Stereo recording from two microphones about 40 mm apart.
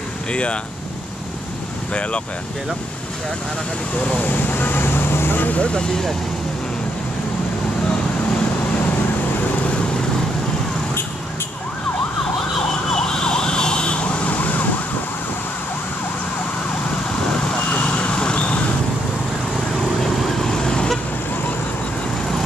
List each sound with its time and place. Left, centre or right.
0.3 s speech: left
4.2 s vehicle: left
5.6 s speech: left
12.9 s emergency vehicle: centre
14.0 s emergency vehicle: left
17.6 s vehicle: left
20.0 s vehicle: centre